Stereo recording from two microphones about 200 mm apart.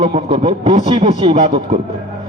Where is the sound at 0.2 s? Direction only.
30° right (ahead or behind).